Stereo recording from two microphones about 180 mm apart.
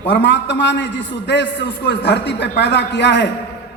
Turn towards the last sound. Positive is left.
turn(degrees=70)  # may be behind; listen again after turning